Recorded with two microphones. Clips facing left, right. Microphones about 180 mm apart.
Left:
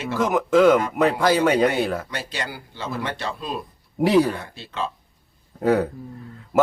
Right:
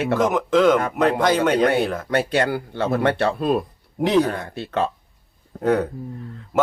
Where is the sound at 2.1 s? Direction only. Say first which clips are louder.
Right 11 dB; 55° right (ahead or behind).